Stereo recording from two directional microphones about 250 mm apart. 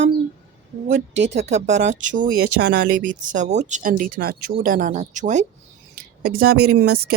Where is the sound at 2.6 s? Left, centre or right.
Right.